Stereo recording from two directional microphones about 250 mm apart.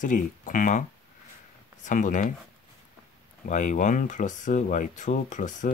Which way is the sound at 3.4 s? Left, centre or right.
Left.